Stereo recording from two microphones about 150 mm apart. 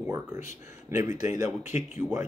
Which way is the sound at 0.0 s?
15° right (ahead or behind).